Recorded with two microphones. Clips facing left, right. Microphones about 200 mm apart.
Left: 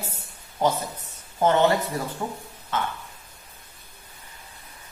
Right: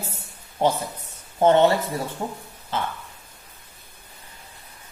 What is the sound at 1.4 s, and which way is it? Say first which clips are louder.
A woman's voice: right 3 dB; 30° right (ahead or behind).